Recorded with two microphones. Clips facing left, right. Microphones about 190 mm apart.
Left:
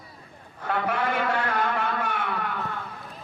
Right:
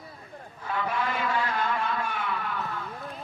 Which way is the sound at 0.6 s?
75° left (ahead or behind).